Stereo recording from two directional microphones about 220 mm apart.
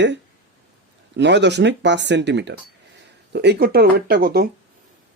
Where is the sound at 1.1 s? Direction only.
50° right (ahead or behind).